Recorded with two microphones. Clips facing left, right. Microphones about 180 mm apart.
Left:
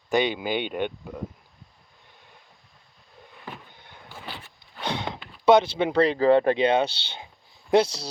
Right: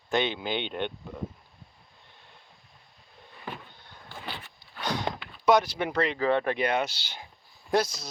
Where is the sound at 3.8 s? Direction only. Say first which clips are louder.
Left 2 dB; 20° left (ahead or behind).